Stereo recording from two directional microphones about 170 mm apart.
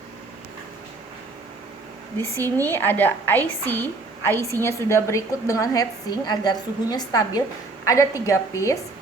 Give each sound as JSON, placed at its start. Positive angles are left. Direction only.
{"t": 2.1, "sound": "a woman's voice", "side_deg": 15}